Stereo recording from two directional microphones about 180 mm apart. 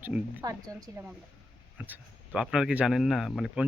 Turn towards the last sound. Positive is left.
turn(degrees=0)  # may be behind; listen again after turning